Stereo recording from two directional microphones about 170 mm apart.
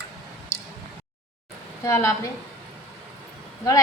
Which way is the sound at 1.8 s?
15° left (ahead or behind).